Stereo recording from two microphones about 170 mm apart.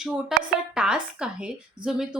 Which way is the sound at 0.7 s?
5° right (ahead or behind).